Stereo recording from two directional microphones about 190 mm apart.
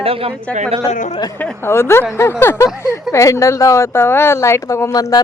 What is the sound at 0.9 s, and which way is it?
Speech, 40° left (ahead or behind).